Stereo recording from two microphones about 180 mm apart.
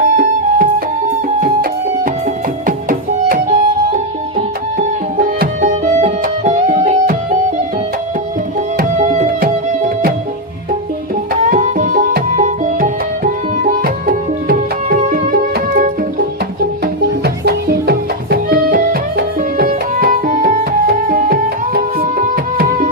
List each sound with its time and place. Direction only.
0.0 s music: 50° right (ahead or behind)
2.6 s music: 50° right (ahead or behind)
8.8 s music: 45° right (ahead or behind)
11.5 s music: 50° right (ahead or behind)